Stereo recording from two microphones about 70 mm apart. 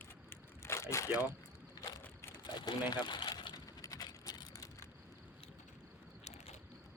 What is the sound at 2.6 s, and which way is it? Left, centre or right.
Speech, left.